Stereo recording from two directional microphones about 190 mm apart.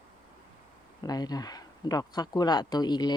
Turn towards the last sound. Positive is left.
turn(degrees=20)  # may be behind; listen again after turning